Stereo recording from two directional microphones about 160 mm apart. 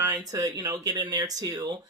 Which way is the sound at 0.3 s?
20° right (ahead or behind).